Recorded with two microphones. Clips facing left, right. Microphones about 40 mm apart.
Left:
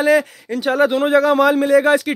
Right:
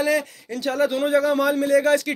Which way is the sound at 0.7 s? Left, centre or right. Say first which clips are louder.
Left 5 dB; left.